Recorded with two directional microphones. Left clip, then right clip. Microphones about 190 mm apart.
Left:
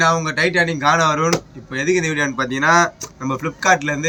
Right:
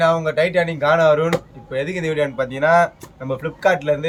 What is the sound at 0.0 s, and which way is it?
A man's voice, 15° right (ahead or behind).